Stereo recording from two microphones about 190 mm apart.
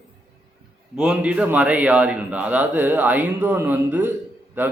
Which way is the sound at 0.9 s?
5° right (ahead or behind).